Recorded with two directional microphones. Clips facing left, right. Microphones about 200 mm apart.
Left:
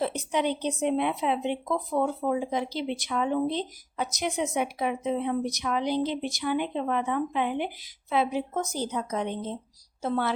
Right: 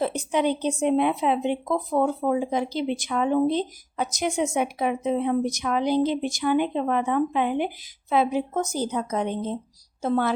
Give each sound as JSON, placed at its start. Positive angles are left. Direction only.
{"t": 0.0, "sound": "speech", "side_deg": -50}